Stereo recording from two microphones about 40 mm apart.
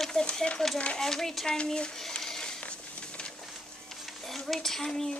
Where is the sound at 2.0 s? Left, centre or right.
Centre.